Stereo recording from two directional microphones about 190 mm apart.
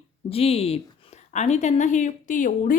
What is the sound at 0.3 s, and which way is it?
Speech, 30° left (ahead or behind).